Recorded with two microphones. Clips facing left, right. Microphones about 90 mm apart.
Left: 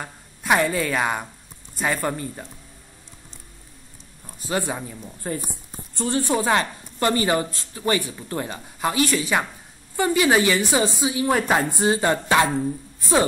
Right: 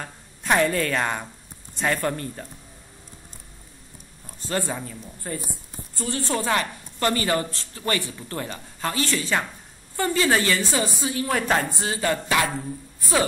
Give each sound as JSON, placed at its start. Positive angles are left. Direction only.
{"t": 0.0, "sound": "a woman's voice", "side_deg": 5}
{"t": 4.4, "sound": "a woman's voice", "side_deg": 15}
{"t": 11.8, "sound": "a woman's voice", "side_deg": 25}